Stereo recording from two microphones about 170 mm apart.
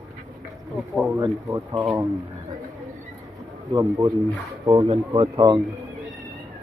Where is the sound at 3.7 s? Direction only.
25° right (ahead or behind).